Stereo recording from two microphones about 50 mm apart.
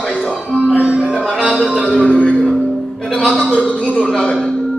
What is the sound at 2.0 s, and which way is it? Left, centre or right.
Speech, left.